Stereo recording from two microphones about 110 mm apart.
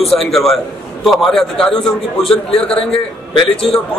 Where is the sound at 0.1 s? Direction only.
Centre (ahead or behind).